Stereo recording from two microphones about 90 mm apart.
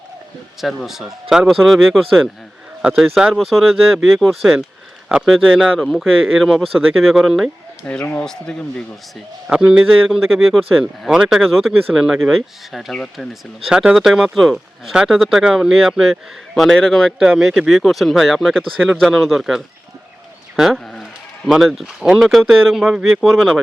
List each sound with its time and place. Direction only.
0.6 s speech: centre (ahead or behind)
7.9 s speech: 20° left (ahead or behind)
8.2 s speech: 5° left (ahead or behind)
9.5 s speech: 10° right (ahead or behind)
13.7 s speech: 10° right (ahead or behind)